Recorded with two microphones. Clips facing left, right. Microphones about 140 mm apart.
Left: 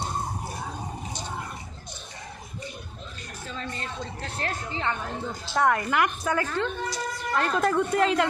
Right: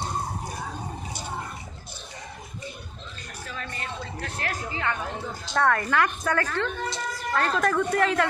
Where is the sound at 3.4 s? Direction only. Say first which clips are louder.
Left 1 dB; 20° left (ahead or behind).